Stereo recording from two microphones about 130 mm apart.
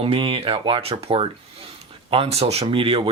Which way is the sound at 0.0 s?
45° right (ahead or behind).